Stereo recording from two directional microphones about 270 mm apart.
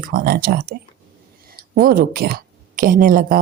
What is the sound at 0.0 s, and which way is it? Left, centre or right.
Speech, right.